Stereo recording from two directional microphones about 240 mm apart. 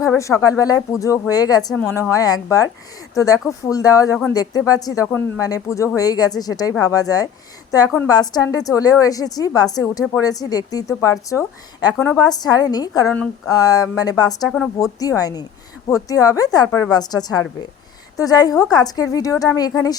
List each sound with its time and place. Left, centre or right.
0.0 s a woman's voice: centre